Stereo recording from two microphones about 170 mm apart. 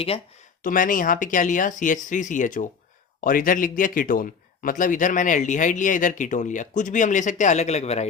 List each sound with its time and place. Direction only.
0.6 s speech: 55° left (ahead or behind)